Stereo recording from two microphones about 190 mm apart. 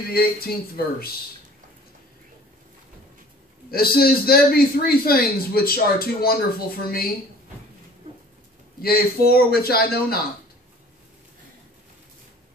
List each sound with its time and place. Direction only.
0.1 s a man's voice: 50° left (ahead or behind)
3.7 s a man's voice: 50° left (ahead or behind)
8.8 s a man's voice: 55° left (ahead or behind)